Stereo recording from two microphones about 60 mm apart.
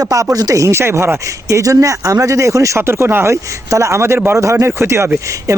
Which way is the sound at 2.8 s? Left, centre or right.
Right.